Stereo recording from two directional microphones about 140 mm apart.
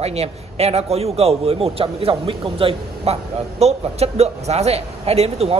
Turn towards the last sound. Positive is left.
turn(degrees=-45)  # may be behind; listen again after turning